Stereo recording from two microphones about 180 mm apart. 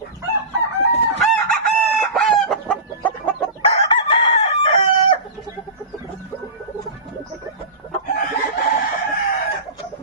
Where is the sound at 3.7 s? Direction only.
30° left (ahead or behind).